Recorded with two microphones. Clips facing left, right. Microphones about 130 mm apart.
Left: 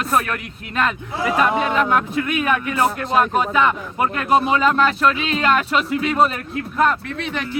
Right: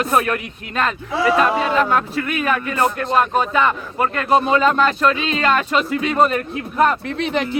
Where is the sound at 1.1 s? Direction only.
90° right.